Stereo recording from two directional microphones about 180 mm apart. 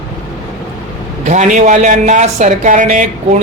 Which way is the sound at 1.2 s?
40° right (ahead or behind).